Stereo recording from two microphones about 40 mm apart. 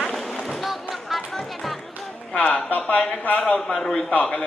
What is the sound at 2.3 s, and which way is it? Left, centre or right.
Speech, left.